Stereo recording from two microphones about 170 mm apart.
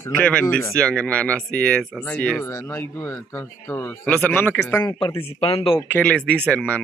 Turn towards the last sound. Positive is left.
turn(degrees=10)  # may be behind; listen again after turning